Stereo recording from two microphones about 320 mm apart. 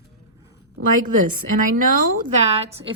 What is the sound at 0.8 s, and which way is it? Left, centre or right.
A woman's voice, right.